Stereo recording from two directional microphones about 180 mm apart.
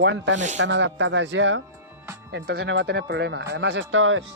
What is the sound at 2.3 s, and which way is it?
A man's voice, 70° right (ahead or behind).